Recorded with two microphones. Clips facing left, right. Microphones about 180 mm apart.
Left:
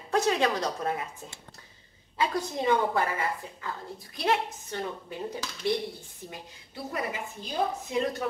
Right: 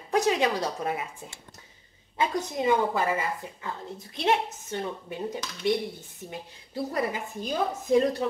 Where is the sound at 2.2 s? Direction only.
20° right (ahead or behind).